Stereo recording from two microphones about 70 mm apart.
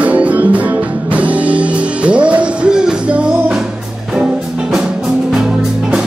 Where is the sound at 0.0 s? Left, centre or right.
Right.